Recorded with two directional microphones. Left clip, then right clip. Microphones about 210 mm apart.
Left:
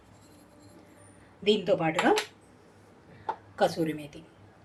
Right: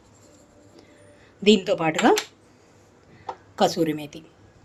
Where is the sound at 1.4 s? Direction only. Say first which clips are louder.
Right 6 dB; 50° right (ahead or behind).